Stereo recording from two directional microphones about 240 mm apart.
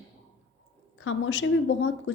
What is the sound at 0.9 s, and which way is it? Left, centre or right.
A woman's voice, left.